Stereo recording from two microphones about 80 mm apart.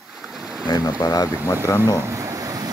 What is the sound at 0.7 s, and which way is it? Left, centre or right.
Speech, left.